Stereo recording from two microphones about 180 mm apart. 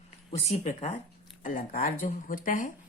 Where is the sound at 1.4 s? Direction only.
45° left (ahead or behind).